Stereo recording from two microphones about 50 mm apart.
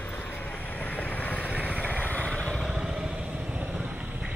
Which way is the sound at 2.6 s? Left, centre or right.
Centre.